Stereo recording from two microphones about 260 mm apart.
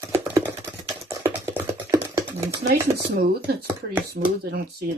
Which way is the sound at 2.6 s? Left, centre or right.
Right.